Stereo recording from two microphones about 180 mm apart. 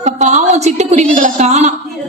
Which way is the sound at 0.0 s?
40° right (ahead or behind).